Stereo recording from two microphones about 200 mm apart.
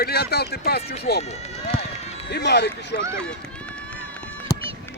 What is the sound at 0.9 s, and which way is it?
Speech, 50° left (ahead or behind).